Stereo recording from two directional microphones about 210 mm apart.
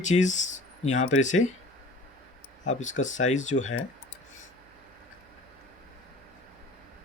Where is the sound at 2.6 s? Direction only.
35° left (ahead or behind).